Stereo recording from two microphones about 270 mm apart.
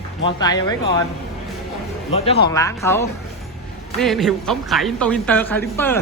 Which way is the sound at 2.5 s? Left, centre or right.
Centre.